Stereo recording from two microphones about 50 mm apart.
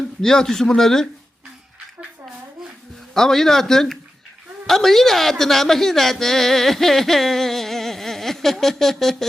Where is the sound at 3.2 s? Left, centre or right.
Centre.